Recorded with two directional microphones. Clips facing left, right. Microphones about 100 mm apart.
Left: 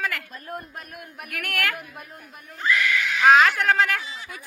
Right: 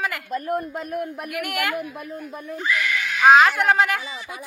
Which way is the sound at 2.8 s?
15° right (ahead or behind).